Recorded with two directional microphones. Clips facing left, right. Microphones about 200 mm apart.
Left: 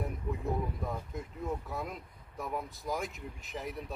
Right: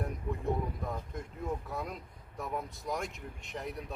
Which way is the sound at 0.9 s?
5° left (ahead or behind).